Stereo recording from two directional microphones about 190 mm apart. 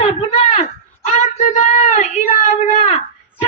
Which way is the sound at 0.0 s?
35° left (ahead or behind).